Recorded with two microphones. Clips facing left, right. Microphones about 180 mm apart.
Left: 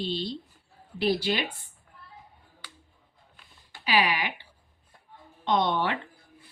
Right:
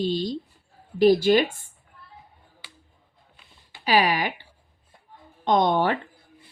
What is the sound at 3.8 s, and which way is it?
Speech, 45° right (ahead or behind).